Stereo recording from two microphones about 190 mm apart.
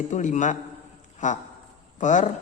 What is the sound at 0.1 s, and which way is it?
Speech, 40° left (ahead or behind).